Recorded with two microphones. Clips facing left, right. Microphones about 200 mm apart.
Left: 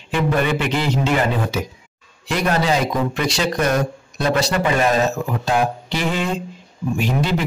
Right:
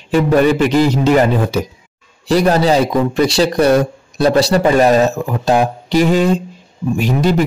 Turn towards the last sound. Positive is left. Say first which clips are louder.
# right 6 dB
turn(degrees=-45)  # may be behind; listen again after turning